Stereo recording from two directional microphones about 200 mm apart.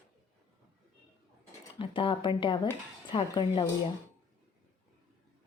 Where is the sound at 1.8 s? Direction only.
25° left (ahead or behind).